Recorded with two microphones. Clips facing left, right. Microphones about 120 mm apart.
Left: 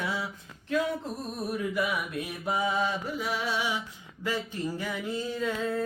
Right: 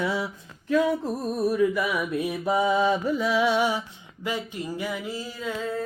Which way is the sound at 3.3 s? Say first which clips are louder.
Right 9 dB; 80° right.